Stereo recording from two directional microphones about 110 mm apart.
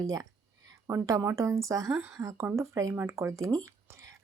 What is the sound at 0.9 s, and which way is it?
A woman's voice, 30° right (ahead or behind).